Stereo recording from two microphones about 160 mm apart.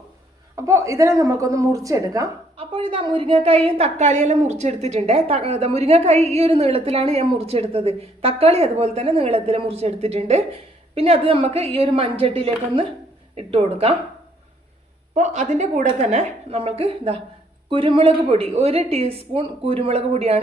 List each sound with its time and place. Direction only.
0.5 s a woman's voice: 20° right (ahead or behind)
2.6 s a woman's voice: 35° right (ahead or behind)
15.1 s a woman's voice: 45° right (ahead or behind)